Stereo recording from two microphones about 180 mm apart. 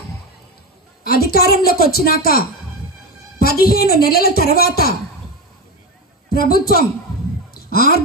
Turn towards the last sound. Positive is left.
turn(degrees=55)  # may be behind; listen again after turning